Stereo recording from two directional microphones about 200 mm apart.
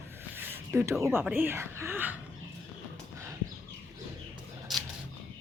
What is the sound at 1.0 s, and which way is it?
A woman's voice, 10° right (ahead or behind).